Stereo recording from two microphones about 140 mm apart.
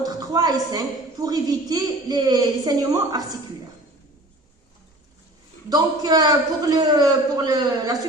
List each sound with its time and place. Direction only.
0.0 s a woman's voice: 25° right (ahead or behind)
5.6 s a woman's voice: 30° right (ahead or behind)